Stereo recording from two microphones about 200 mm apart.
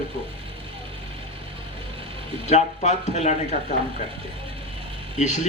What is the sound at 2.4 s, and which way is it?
Speech, 35° left (ahead or behind).